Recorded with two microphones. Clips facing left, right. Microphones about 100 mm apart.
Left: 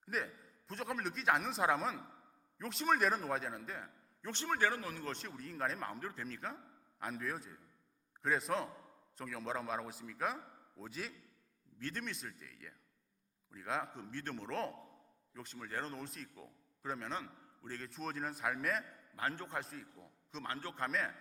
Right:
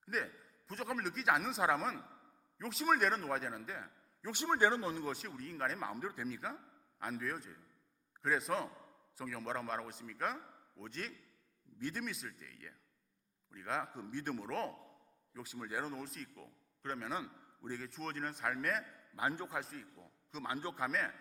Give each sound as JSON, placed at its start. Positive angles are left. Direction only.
{"t": 0.0, "sound": "a man's voice", "side_deg": 0}
{"t": 4.4, "sound": "a man's voice", "side_deg": -20}
{"t": 5.0, "sound": "a man's voice", "side_deg": -5}
{"t": 11.8, "sound": "a man's voice", "side_deg": -10}
{"t": 14.0, "sound": "a man's voice", "side_deg": -15}
{"t": 17.1, "sound": "a man's voice", "side_deg": -10}
{"t": 17.8, "sound": "a man's voice", "side_deg": 0}
{"t": 19.1, "sound": "speech", "side_deg": -15}
{"t": 19.5, "sound": "a man's voice", "side_deg": 0}
{"t": 20.4, "sound": "speech", "side_deg": -15}
{"t": 20.7, "sound": "a man's voice", "side_deg": 0}